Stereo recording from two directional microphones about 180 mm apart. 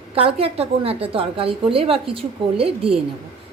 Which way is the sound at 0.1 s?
30° right (ahead or behind).